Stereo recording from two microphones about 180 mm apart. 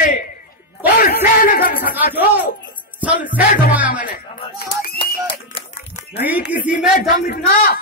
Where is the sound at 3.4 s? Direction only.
55° left (ahead or behind).